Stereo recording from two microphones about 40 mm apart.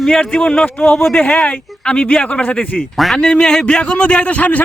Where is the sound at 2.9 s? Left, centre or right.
Centre.